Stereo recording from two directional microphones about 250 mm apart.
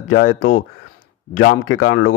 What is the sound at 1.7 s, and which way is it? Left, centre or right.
Speech, left.